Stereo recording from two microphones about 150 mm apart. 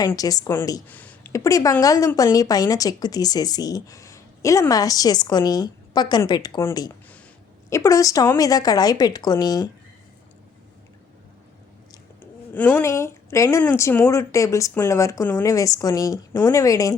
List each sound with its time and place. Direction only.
0.1 s speech: 25° left (ahead or behind)
0.9 s speech: 10° left (ahead or behind); by 9.6 s 25° left (ahead or behind)
12.2 s speech: 10° left (ahead or behind)